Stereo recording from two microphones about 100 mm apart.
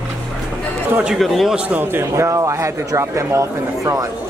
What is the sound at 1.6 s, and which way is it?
Speech, 20° right (ahead or behind).